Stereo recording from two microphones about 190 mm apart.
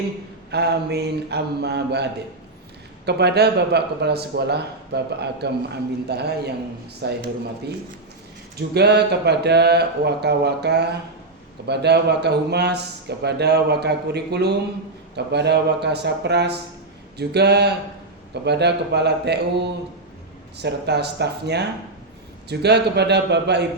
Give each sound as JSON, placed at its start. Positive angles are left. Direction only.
{"t": 0.5, "sound": "a man's voice", "side_deg": -60}
{"t": 3.1, "sound": "a man's voice", "side_deg": -60}
{"t": 8.5, "sound": "a man's voice", "side_deg": -60}